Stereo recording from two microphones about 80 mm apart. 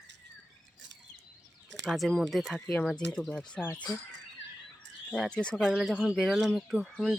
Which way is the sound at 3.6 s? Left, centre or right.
Left.